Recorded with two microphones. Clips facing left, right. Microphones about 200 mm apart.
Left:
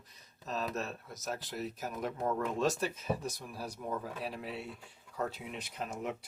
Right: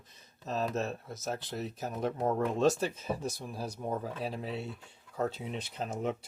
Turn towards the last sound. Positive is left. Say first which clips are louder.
# right 4 dB
turn(degrees=-30)  # may be behind; listen again after turning